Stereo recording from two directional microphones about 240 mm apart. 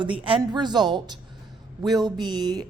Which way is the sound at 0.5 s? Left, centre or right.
Centre.